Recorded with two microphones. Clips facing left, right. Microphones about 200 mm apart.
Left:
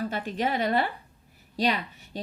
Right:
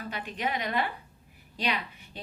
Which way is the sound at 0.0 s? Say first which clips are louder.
Left 5 dB; 45° left (ahead or behind).